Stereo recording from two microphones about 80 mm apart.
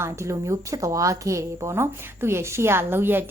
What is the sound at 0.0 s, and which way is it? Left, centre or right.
A woman's voice, right.